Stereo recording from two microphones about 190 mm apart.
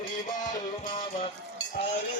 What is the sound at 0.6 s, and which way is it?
Music, 45° left (ahead or behind).